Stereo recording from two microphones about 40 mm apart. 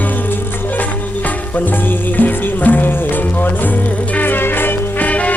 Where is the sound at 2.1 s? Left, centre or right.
Left.